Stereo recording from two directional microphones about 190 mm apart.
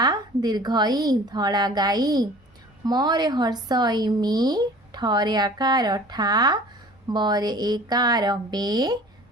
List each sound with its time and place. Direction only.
0.0 s speech: 20° right (ahead or behind)